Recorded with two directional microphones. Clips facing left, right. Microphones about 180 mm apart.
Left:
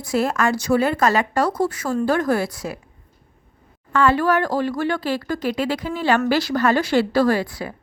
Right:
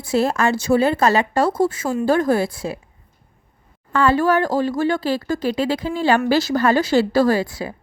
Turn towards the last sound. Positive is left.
turn(degrees=-25)  # may be behind; listen again after turning